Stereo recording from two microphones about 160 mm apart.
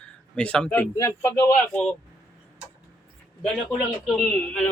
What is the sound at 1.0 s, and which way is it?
Speech, 20° left (ahead or behind).